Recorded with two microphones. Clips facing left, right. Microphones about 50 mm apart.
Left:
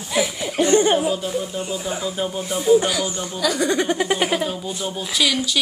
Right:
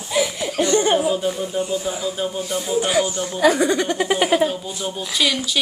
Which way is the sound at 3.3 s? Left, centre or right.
Right.